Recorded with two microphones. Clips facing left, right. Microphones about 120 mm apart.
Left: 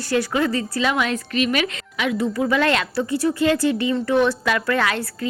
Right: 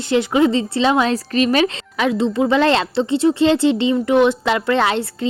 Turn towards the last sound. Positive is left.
turn(degrees=-25)  # may be behind; listen again after turning